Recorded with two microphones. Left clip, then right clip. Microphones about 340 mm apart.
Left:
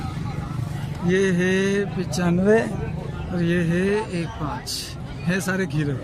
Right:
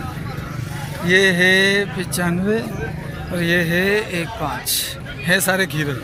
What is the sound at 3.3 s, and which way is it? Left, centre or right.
Speech, centre.